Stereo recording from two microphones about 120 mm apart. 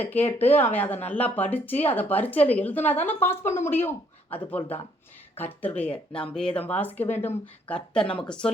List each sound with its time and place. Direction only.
0.0 s speech: 15° left (ahead or behind)